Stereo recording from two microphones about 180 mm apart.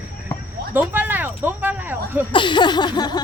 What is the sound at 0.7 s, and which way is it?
Speech, 10° right (ahead or behind).